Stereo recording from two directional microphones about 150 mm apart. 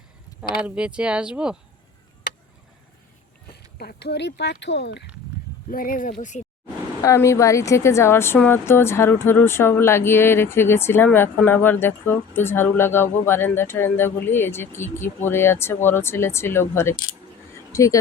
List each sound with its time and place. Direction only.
0.6 s speech: 5° right (ahead or behind)
3.5 s a sound: 90° left
4.7 s speech: 90° left
5.7 s speech: 70° left (ahead or behind)
7.0 s speech: 20° left (ahead or behind)
17.7 s a sound: 20° left (ahead or behind)